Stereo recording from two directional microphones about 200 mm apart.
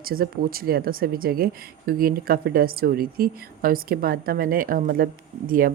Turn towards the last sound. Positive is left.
turn(degrees=-45)  # may be behind; listen again after turning